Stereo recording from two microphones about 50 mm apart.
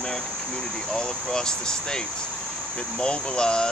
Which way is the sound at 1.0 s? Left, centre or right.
Centre.